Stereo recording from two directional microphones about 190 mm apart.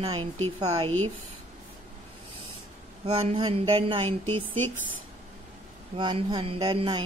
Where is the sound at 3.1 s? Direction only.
30° right (ahead or behind).